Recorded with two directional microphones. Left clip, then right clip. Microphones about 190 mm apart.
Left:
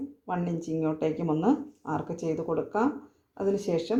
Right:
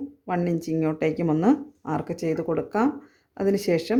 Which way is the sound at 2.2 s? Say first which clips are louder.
Right 6 dB; 90° right.